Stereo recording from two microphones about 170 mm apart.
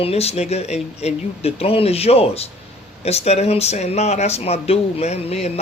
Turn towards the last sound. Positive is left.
turn(degrees=40)  # may be behind; listen again after turning